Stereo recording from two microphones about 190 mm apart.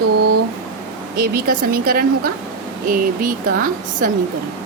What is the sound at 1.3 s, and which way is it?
Speech, 50° right (ahead or behind).